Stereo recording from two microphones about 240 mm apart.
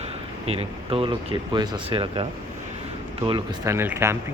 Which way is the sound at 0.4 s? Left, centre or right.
Right.